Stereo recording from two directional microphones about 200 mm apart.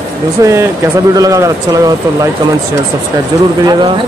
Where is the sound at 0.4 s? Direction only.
15° right (ahead or behind).